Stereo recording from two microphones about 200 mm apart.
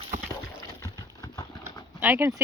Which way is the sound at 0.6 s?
20° left (ahead or behind).